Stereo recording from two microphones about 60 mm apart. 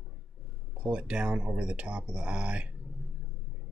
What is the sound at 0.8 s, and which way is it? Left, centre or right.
Speech, centre.